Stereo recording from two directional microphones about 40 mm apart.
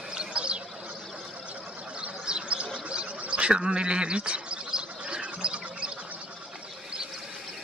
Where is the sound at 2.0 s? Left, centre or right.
Right.